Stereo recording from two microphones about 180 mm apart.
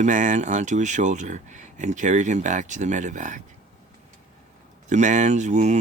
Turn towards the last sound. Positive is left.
turn(degrees=-40)  # may be behind; listen again after turning